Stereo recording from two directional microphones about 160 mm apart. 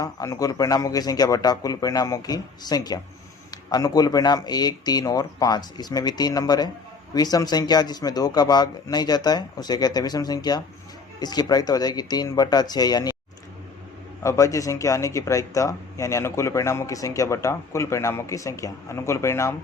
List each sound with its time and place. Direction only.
0.0 s speech: 20° left (ahead or behind)
14.3 s speech: 20° left (ahead or behind)